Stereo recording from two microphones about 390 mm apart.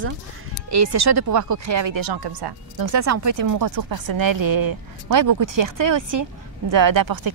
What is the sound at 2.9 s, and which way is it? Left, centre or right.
Speech, right.